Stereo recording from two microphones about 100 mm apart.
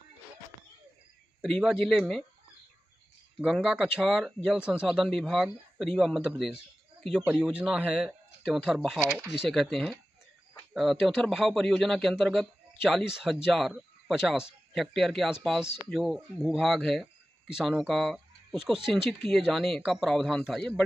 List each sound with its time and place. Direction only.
1.5 s speech: centre (ahead or behind)
3.5 s speech: 5° right (ahead or behind)